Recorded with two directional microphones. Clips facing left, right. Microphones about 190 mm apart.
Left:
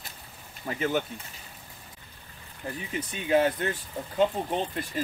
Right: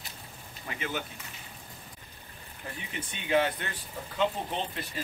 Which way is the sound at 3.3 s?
40° left (ahead or behind).